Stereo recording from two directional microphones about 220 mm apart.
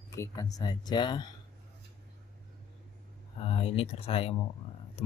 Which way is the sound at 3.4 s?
25° left (ahead or behind).